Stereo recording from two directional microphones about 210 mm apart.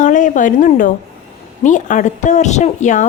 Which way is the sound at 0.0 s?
35° left (ahead or behind).